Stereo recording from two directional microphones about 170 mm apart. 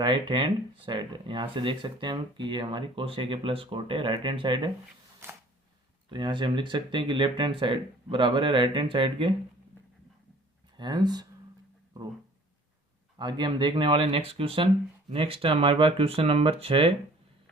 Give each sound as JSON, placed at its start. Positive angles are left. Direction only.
{"t": 0.0, "sound": "speech", "side_deg": -25}
{"t": 6.1, "sound": "speech", "side_deg": -30}
{"t": 10.8, "sound": "speech", "side_deg": -25}
{"t": 13.1, "sound": "speech", "side_deg": -25}